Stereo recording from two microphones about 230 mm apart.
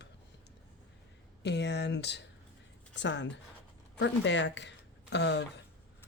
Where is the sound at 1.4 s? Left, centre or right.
Left.